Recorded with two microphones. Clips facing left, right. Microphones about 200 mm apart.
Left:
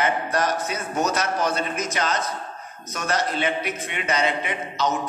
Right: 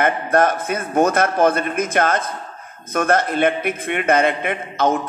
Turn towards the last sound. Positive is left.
turn(degrees=-55)  # may be behind; listen again after turning